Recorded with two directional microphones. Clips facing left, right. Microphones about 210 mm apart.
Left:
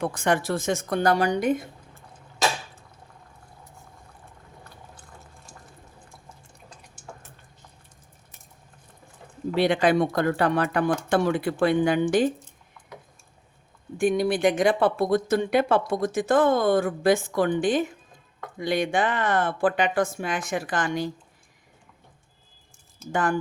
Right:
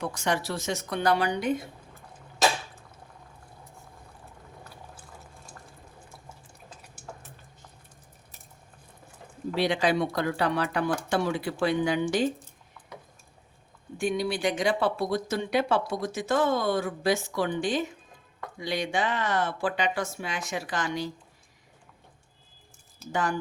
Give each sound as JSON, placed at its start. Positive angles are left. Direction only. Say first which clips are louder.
{"t": 0.0, "sound": "speech", "louder": "left 5 dB", "side_deg": 55}
{"t": 9.8, "sound": "speech", "louder": "left 5 dB", "side_deg": 50}
{"t": 14.0, "sound": "speech", "louder": "left 6 dB", "side_deg": 50}
{"t": 23.1, "sound": "speech", "louder": "left 4 dB", "side_deg": 50}